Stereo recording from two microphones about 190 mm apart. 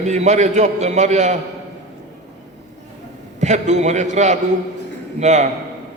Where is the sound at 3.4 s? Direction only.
40° right (ahead or behind).